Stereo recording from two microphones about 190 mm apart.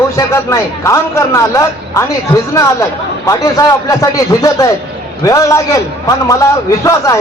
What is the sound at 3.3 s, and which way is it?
A man's voice, 20° left (ahead or behind).